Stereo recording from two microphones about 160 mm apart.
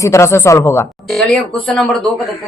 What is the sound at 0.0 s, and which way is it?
Speech, 15° left (ahead or behind).